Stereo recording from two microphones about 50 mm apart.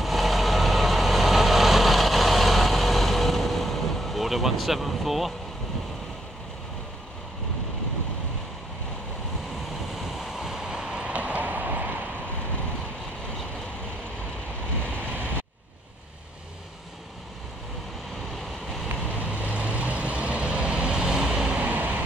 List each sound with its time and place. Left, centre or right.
0.0 s vehicle: centre
9.9 s waves: centre
11.1 s clip-clop: right
18.9 s vehicle: right; by 21.5 s centre
21.5 s vehicle: right